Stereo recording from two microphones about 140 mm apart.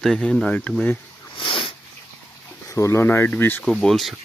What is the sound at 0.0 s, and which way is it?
Speech, 5° left (ahead or behind).